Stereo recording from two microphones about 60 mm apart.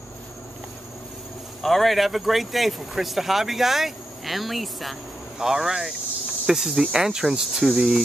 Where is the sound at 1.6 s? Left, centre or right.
Centre.